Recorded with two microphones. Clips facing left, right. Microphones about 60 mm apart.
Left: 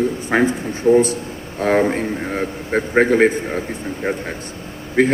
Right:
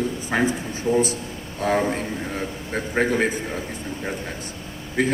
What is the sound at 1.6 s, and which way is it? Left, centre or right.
A man's voice, left.